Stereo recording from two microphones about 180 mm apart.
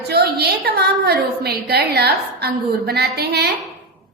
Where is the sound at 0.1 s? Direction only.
60° right (ahead or behind).